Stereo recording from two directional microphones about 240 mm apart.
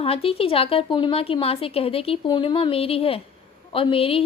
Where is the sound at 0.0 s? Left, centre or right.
Left.